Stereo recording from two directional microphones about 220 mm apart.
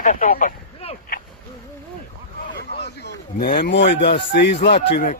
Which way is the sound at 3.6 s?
55° left (ahead or behind).